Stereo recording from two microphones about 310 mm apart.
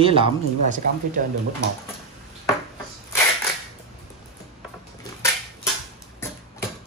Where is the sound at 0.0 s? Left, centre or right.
Centre.